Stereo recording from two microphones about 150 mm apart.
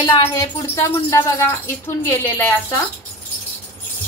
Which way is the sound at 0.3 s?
20° left (ahead or behind).